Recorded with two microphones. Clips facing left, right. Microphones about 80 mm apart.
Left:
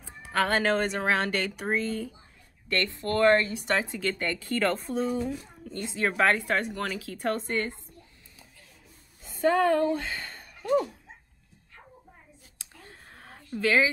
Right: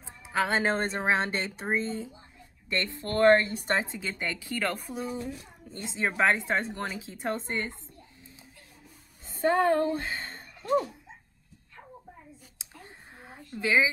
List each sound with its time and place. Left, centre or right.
0.0 s music: centre
0.7 s a woman's voice: right
4.0 s a woman's voice: centre
9.2 s a woman's voice: right
12.5 s a sound: centre
13.6 s a woman's voice: centre